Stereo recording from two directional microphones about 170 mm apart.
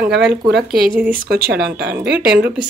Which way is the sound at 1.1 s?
60° right (ahead or behind).